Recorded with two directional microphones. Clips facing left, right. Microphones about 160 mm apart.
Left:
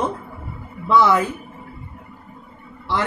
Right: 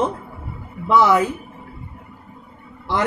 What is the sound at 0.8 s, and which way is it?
Music, 10° right (ahead or behind).